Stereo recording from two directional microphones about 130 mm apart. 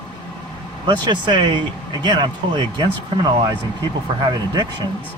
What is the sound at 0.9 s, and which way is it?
Speech, 35° right (ahead or behind).